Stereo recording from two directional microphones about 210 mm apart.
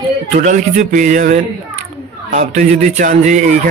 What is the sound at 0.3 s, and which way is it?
Speech, 35° right (ahead or behind).